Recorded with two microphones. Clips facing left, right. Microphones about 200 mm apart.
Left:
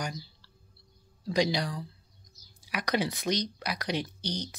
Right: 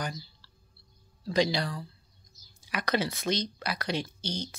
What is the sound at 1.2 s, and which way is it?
Speech, 15° left (ahead or behind).